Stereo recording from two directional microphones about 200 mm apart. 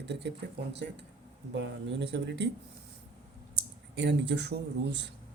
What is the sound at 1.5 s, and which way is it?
Speech, 60° right (ahead or behind).